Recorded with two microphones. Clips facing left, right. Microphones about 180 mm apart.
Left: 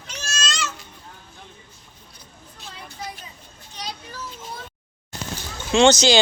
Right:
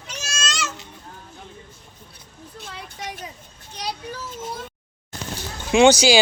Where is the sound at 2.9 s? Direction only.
80° right.